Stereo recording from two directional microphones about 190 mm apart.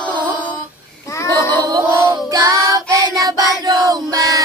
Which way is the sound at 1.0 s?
15° left (ahead or behind).